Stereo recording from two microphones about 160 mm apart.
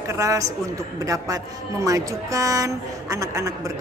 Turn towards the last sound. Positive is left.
turn(degrees=-20)  # may be behind; listen again after turning